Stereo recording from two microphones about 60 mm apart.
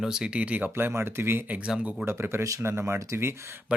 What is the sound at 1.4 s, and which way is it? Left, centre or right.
Speech, right.